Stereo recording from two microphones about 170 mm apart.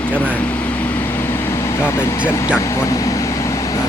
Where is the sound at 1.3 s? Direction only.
15° left (ahead or behind).